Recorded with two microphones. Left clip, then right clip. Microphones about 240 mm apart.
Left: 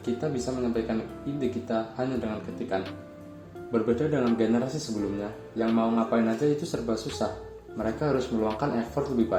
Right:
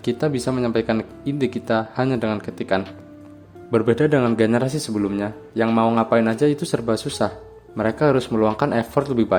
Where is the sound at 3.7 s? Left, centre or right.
Right.